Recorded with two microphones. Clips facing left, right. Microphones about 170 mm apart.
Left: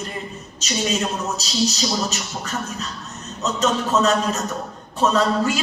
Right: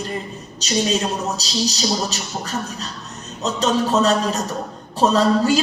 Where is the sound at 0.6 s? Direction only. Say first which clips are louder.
Right 3 dB; 35° right (ahead or behind).